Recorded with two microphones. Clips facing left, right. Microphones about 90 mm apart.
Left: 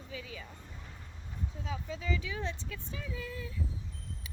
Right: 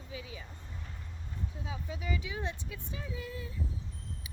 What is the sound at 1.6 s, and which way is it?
Speech, 15° right (ahead or behind).